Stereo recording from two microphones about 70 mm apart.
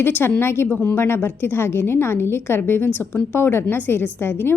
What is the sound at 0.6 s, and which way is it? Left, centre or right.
Speech, left.